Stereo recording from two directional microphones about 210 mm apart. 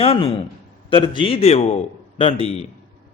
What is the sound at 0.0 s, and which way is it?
A man's voice, 25° left (ahead or behind).